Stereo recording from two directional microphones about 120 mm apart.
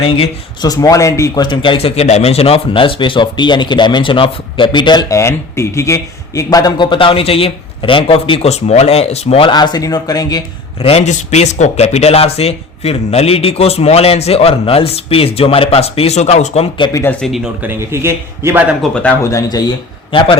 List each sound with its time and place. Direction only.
0.6 s speech: 30° left (ahead or behind)
1.4 s speech: 45° left (ahead or behind); by 9.5 s 60° left (ahead or behind)
9.5 s speech: 35° left (ahead or behind)
10.8 s speech: 55° left (ahead or behind)
11.1 s speech: 75° left (ahead or behind)
16.9 s speech: 20° left (ahead or behind)
17.2 s speech: centre (ahead or behind)
17.6 s a man's voice: 20° right (ahead or behind)
18.8 s speech: 10° left (ahead or behind)
19.2 s speech: 25° left (ahead or behind); by 20.3 s 45° left (ahead or behind)